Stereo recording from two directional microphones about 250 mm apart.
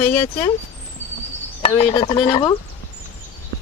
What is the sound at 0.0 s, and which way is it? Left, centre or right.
Speech, centre.